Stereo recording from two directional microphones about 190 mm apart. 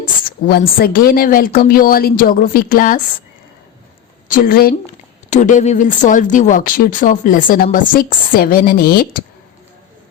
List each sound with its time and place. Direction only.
0.0 s a sound: 50° left (ahead or behind)
0.8 s speech: 50° left (ahead or behind)
4.3 s speech: 50° left (ahead or behind)
5.3 s speech: 40° left (ahead or behind)